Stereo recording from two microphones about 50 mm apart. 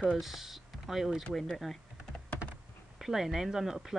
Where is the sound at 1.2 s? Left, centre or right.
Centre.